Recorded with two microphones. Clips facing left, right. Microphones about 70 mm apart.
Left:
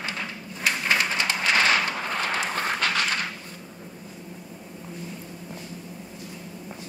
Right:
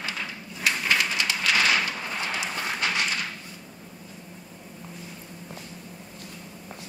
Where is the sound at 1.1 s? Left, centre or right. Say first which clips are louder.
Left 2 dB; left.